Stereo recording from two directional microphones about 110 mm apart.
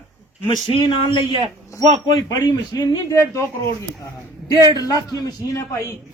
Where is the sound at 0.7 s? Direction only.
50° left (ahead or behind).